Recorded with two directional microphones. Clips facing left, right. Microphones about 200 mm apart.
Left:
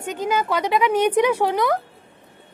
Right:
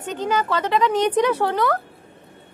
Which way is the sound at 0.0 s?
10° left (ahead or behind).